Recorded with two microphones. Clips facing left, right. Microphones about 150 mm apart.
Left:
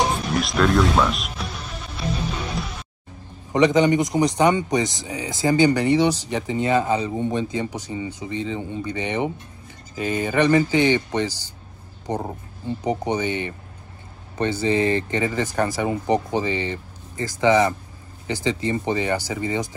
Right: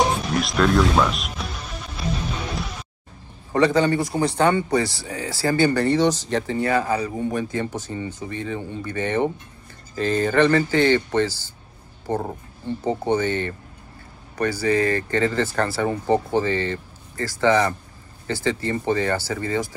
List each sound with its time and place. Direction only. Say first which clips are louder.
0.2 s music: even; centre (ahead or behind)
3.5 s speech: left 2 dB; 15° left (ahead or behind)